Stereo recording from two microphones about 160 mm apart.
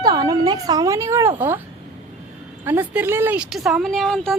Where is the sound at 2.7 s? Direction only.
10° right (ahead or behind); by 4.4 s 5° left (ahead or behind).